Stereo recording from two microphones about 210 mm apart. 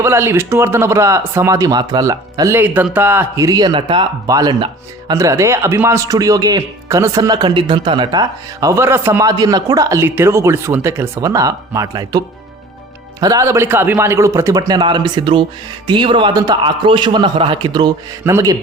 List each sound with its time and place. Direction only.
0.0 s a man's voice: 10° right (ahead or behind)